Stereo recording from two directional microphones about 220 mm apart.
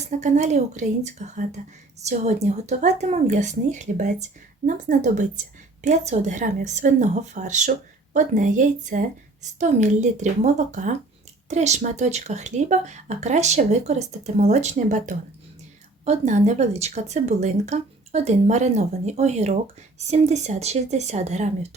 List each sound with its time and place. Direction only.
0.1 s speech: 35° right (ahead or behind)